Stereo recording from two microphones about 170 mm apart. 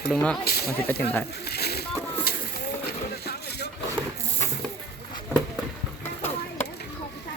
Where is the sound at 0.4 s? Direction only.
65° left (ahead or behind).